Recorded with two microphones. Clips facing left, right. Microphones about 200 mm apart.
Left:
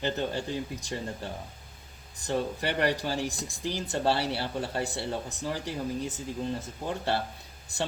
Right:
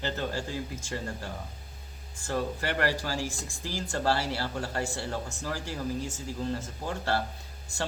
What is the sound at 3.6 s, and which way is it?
Speech, 20° left (ahead or behind).